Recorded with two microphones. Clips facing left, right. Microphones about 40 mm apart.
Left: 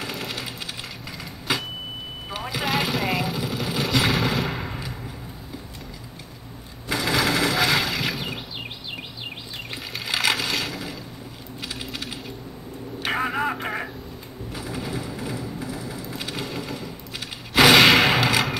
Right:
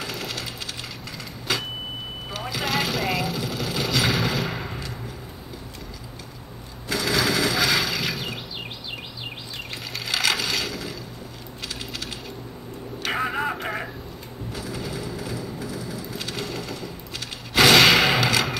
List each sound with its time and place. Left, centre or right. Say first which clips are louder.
0.0 s sewing machine: even; centre
1.5 s a sound: left 1 dB; centre
2.3 s sewing machine: left 1 dB; centre
6.9 s sewing machine: left 1 dB; centre
7.2 s a sound: left 1 dB; centre
9.9 s crushing: left 1 dB; centre
11.6 s coin: left 1 dB; centre
13.1 s radio: left 1 dB; centre
14.5 s crushing: left 1 dB; centre
17.6 s a sound: left 1 dB; centre